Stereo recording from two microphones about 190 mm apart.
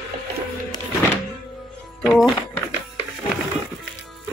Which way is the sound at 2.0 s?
Centre (ahead or behind).